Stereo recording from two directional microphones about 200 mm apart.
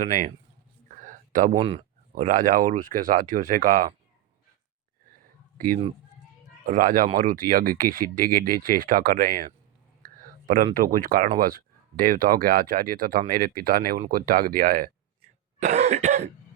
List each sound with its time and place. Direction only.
0.0 s cough: 40° right (ahead or behind)
0.9 s a sound: 40° right (ahead or behind)
1.5 s speech: 25° right (ahead or behind)
2.1 s speech: 40° right (ahead or behind)
5.2 s a sound: 45° right (ahead or behind)
6.7 s speech: 45° right (ahead or behind)
10.0 s a sound: 45° right (ahead or behind)
10.8 s speech: 45° right (ahead or behind)
15.6 s cough: 35° right (ahead or behind)